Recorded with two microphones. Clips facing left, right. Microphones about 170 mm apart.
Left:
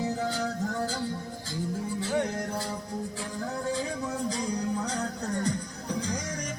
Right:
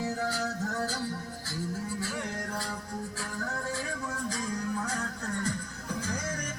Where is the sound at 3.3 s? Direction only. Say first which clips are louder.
Left 5 dB; 20° left (ahead or behind).